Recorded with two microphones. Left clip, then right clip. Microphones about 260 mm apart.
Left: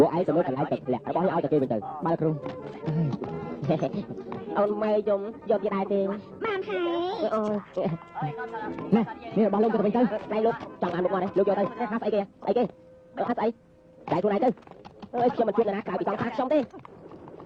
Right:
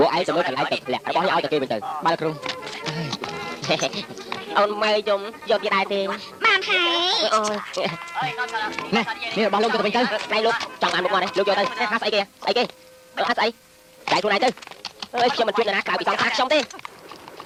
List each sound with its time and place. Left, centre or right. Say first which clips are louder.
0.0 s speech: right 3 dB; centre
1.9 s speech: right 6 dB; right
2.2 s speech: right 3 dB; centre
15.2 s speech: right 4 dB; centre